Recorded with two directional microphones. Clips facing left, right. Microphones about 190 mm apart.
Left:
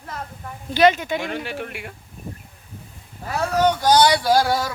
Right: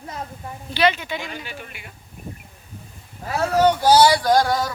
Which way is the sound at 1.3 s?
70° left (ahead or behind).